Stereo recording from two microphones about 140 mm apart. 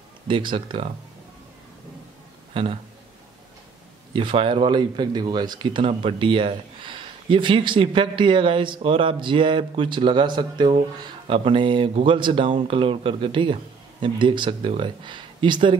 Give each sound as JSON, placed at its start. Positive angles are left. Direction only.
{"t": 0.3, "sound": "speech", "side_deg": -35}
{"t": 2.5, "sound": "a sound", "side_deg": -40}
{"t": 4.1, "sound": "speech", "side_deg": -35}